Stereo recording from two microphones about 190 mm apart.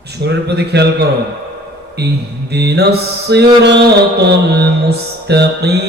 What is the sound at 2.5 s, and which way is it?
A man's voice, 60° right (ahead or behind).